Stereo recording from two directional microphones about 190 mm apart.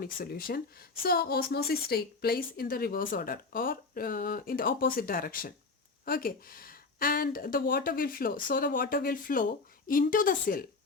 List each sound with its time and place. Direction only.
0.0 s speech: 50° left (ahead or behind)